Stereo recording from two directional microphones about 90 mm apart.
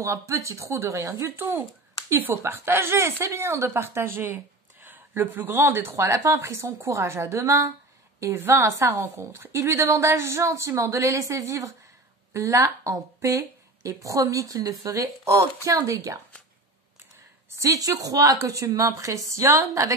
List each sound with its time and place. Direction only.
0.0 s speech: 35° right (ahead or behind)
17.6 s speech: 40° right (ahead or behind)